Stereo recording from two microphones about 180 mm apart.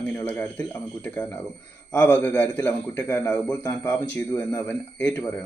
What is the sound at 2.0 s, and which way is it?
A man's voice, 10° left (ahead or behind).